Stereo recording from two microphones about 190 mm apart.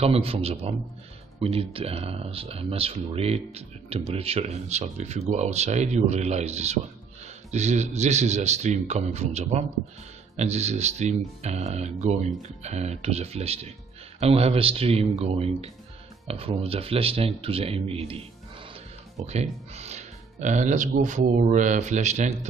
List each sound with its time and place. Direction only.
0.0 s speech: 30° right (ahead or behind)
19.7 s speech: 35° right (ahead or behind)